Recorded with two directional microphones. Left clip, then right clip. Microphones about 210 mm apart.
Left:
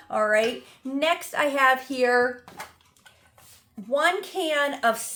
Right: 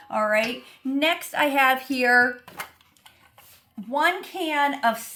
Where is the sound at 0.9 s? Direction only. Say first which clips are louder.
Right 1 dB; 10° left (ahead or behind).